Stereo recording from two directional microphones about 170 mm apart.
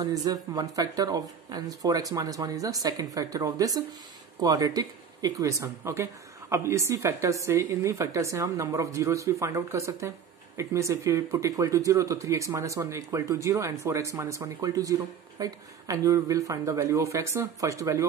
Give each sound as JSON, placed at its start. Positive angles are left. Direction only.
{"t": 0.0, "sound": "speech", "side_deg": -20}